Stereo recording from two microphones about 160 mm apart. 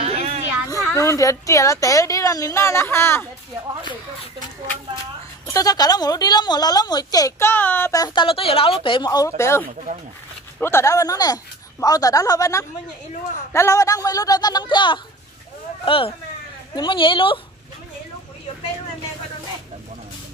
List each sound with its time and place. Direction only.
0.0 s children playing: 40° right (ahead or behind)
0.7 s a woman's voice: 20° left (ahead or behind)
5.5 s a woman's voice: 25° left (ahead or behind)